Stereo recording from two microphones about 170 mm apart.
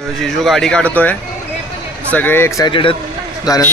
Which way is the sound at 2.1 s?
10° left (ahead or behind).